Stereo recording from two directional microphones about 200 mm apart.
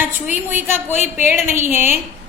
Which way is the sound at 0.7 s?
35° left (ahead or behind).